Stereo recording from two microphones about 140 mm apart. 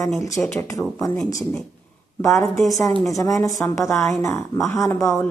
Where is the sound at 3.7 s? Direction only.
20° left (ahead or behind).